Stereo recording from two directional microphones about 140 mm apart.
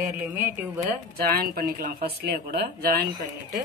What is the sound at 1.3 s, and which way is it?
Speech, 90° right.